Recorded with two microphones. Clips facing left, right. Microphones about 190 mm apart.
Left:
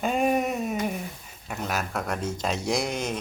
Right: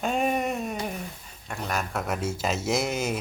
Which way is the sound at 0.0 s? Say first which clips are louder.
Left 2 dB; centre (ahead or behind).